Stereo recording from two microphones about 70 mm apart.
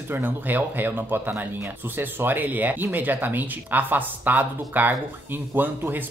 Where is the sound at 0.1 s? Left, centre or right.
Right.